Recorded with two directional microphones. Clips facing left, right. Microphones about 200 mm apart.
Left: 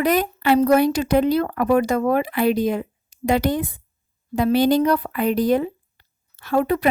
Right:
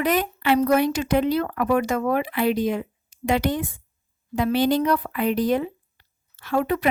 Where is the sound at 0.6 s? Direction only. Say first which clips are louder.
Left 4 dB; 35° left (ahead or behind).